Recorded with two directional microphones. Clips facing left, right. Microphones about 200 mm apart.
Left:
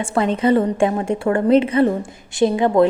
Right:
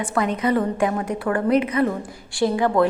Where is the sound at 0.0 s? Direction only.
25° left (ahead or behind).